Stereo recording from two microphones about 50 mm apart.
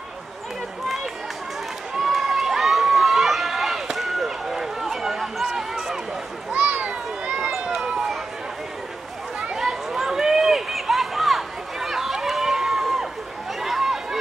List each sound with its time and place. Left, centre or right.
2.0 s run: centre
6.7 s run: right
7.5 s run: centre
9.4 s a sound: centre